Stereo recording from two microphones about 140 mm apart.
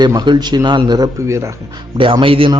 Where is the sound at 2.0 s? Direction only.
40° right (ahead or behind).